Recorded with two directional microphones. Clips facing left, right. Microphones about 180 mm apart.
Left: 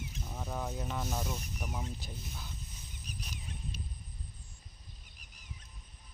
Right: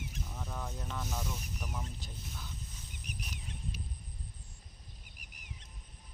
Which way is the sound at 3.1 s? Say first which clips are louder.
Even; 20° right (ahead or behind).